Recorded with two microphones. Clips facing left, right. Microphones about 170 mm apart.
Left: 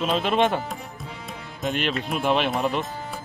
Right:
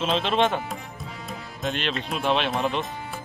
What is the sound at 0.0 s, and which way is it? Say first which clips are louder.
Speech: left 1 dB; centre (ahead or behind).